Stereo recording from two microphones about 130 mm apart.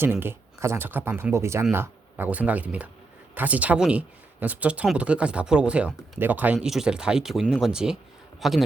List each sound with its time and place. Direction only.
0.0 s speech: 15° right (ahead or behind); by 8.6 s centre (ahead or behind)